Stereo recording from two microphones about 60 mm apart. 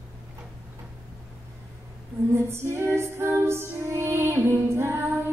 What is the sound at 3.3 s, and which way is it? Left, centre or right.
Female singing, right.